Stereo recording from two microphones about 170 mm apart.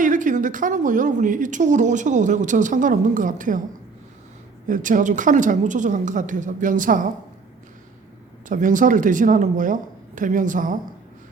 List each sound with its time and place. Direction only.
0.0 s a woman's voice: 50° right (ahead or behind)
4.7 s a woman's voice: 50° right (ahead or behind)
8.4 s a woman's voice: 50° right (ahead or behind)